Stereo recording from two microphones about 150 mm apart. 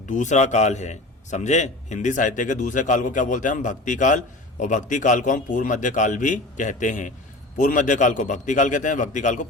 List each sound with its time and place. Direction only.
0.0 s a man's voice: 55° left (ahead or behind)